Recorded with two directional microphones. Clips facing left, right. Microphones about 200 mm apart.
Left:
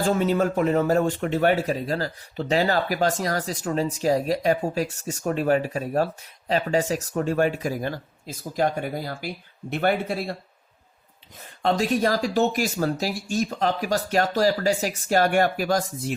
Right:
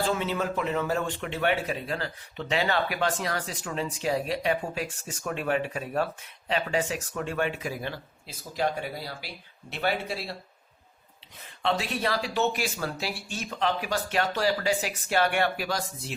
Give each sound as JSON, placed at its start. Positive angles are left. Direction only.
{"t": 0.0, "sound": "speech", "side_deg": 45}
{"t": 11.6, "sound": "speech", "side_deg": 45}